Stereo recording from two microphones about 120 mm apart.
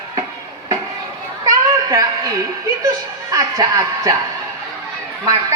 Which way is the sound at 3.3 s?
30° right (ahead or behind).